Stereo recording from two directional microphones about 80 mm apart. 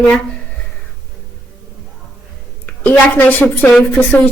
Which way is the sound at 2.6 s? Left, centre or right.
Left.